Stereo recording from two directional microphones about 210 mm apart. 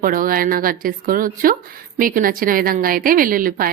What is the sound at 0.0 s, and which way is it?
A woman's voice, 40° right (ahead or behind).